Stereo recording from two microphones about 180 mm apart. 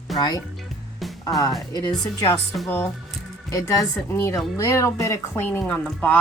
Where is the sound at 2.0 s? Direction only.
20° left (ahead or behind).